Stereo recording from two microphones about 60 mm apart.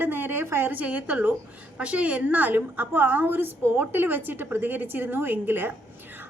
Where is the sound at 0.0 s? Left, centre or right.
Right.